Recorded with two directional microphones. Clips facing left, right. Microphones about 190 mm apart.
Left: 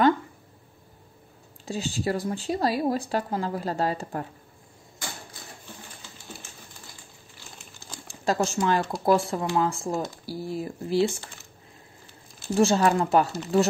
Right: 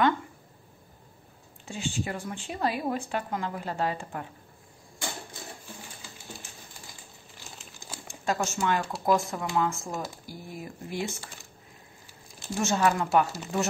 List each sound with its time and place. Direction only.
1.7 s speech: 35° left (ahead or behind)
8.1 s speech: 35° left (ahead or behind)
12.5 s speech: 35° left (ahead or behind)